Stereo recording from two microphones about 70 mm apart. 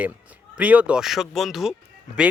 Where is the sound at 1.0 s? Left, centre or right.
Centre.